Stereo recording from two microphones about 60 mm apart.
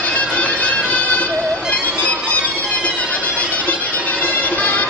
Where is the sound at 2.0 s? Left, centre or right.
Left.